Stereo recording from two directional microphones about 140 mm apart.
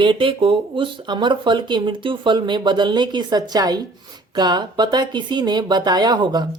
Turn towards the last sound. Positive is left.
turn(degrees=-30)  # may be behind; listen again after turning